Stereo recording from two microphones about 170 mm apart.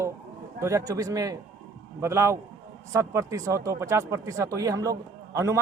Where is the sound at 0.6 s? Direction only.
20° right (ahead or behind).